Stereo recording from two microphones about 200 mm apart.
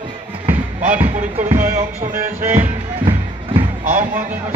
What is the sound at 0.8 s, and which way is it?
Speech, 10° right (ahead or behind).